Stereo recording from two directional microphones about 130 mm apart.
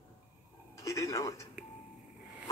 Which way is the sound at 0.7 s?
25° left (ahead or behind).